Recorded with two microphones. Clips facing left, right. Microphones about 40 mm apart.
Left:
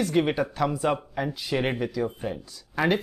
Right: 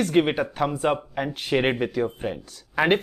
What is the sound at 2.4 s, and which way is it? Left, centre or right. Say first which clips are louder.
Speech: right 1 dB; right.